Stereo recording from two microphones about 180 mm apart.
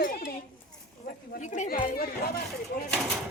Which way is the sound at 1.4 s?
40° left (ahead or behind).